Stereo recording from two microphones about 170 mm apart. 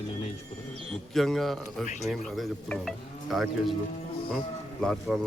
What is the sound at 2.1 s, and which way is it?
Speech, centre (ahead or behind).